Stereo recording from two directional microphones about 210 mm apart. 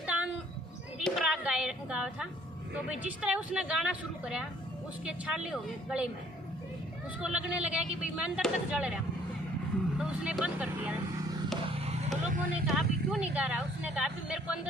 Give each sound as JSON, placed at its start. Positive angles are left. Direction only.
{"t": 0.0, "sound": "a sound", "side_deg": -5}
{"t": 2.7, "sound": "speech", "side_deg": -5}
{"t": 7.2, "sound": "speech", "side_deg": -5}
{"t": 10.0, "sound": "speech", "side_deg": -5}
{"t": 11.9, "sound": "vehicle", "side_deg": -30}
{"t": 12.6, "sound": "speech", "side_deg": 0}